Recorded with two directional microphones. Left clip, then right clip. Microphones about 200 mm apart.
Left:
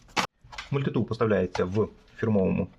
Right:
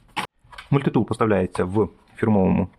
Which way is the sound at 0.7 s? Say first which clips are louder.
Right 7 dB; 30° right (ahead or behind).